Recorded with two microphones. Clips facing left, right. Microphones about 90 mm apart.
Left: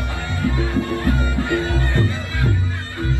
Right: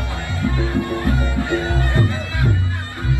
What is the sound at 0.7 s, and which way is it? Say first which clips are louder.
Music: even; 20° right (ahead or behind).